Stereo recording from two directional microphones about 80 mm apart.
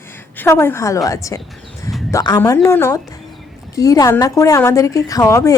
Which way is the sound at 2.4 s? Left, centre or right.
Left.